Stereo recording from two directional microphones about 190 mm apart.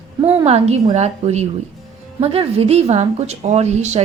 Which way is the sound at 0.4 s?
35° right (ahead or behind).